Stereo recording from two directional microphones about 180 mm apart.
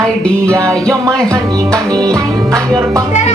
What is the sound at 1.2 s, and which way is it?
Speech, 20° right (ahead or behind).